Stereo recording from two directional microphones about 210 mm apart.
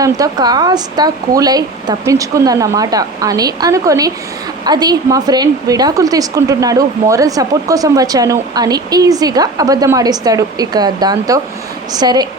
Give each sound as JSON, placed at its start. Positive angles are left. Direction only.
{"t": 0.0, "sound": "a woman's voice", "side_deg": -20}